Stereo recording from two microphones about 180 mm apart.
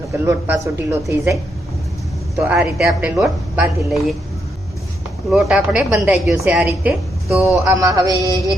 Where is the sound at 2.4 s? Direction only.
5° right (ahead or behind).